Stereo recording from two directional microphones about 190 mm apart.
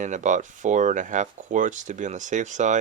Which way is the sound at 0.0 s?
40° right (ahead or behind).